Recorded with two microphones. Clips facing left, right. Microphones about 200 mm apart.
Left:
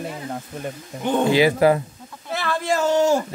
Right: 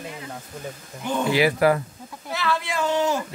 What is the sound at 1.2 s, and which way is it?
Speech, 20° left (ahead or behind).